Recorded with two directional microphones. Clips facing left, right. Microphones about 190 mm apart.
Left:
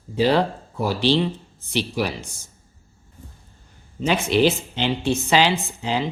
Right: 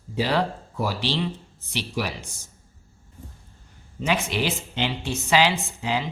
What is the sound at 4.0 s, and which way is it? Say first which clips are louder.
Speech: left 7 dB; 30° left (ahead or behind).